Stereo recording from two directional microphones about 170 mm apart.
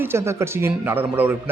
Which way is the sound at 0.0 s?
15° right (ahead or behind).